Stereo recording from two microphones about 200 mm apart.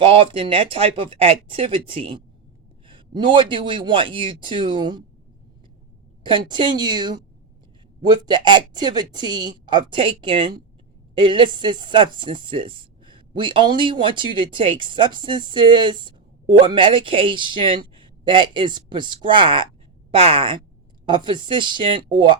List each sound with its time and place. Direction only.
0.0 s speech: 25° right (ahead or behind)
6.2 s speech: 25° right (ahead or behind)